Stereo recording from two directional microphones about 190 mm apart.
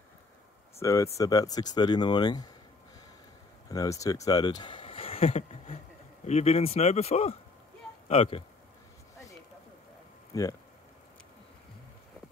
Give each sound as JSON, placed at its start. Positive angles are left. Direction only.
{"t": 0.7, "sound": "speech", "side_deg": 15}
{"t": 3.6, "sound": "speech", "side_deg": 20}